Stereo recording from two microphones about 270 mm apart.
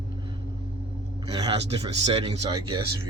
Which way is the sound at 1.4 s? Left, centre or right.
Centre.